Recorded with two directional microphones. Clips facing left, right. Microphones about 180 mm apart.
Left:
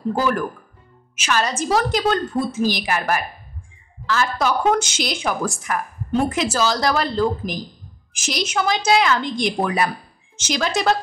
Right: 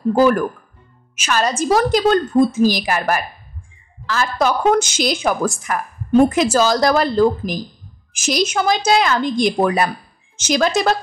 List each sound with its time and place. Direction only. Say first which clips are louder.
1.1 s a woman's voice: right 3 dB; 45° right (ahead or behind)